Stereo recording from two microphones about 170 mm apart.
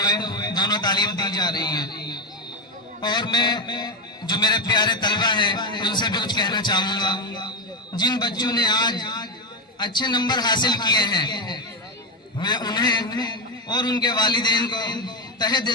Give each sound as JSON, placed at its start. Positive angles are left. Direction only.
{"t": 0.0, "sound": "a man's voice", "side_deg": 25}
{"t": 3.0, "sound": "a man's voice", "side_deg": 25}